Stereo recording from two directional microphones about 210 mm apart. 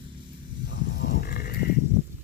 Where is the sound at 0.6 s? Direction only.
50° left (ahead or behind).